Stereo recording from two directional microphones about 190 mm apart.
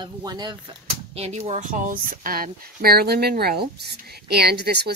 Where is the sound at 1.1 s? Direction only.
35° right (ahead or behind).